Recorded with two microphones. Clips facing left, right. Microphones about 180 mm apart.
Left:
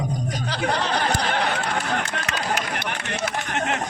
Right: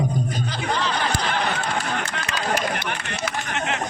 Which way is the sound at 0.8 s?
50° left (ahead or behind).